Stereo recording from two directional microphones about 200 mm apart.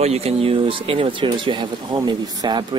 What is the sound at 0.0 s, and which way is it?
Speech, 30° right (ahead or behind).